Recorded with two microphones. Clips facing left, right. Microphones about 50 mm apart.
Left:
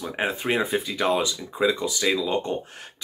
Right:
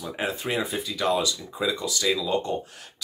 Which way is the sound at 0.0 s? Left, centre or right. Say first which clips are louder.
Left 3 dB; left.